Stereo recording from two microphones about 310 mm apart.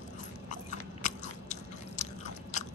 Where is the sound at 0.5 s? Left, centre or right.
Left.